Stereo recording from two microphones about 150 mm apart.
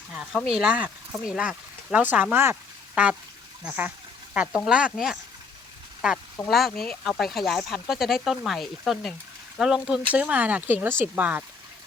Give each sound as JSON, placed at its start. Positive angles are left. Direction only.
{"t": 0.1, "sound": "speech", "side_deg": -5}
{"t": 6.5, "sound": "speech", "side_deg": 0}